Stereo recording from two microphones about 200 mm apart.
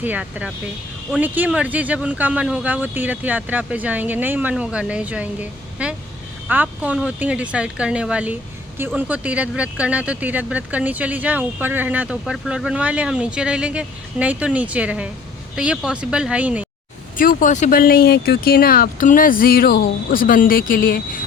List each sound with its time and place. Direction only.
0.0 s speech: 5° right (ahead or behind)
17.2 s speech: 40° left (ahead or behind)